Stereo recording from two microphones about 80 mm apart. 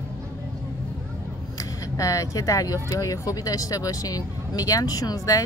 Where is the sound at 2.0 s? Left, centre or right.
Left.